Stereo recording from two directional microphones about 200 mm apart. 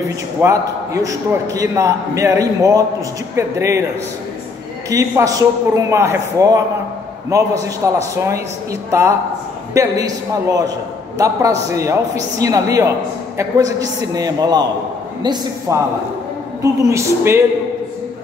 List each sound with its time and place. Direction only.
0.4 s a man's voice: 15° right (ahead or behind)
4.8 s a man's voice: 15° right (ahead or behind)
9.8 s a man's voice: 15° right (ahead or behind)
16.9 s a man's voice: 10° right (ahead or behind)